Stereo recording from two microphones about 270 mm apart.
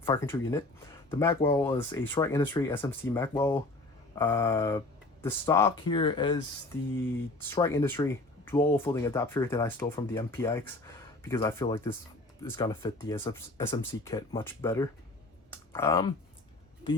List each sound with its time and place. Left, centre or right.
0.0 s speech: centre
7.4 s speech: centre
15.4 s clicking: centre